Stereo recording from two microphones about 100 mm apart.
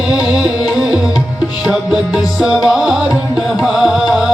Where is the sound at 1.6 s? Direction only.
5° right (ahead or behind).